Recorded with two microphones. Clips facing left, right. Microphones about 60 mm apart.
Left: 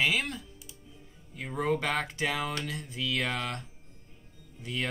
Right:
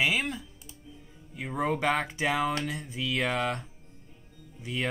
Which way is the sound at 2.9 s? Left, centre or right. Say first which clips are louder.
Right 1 dB; centre.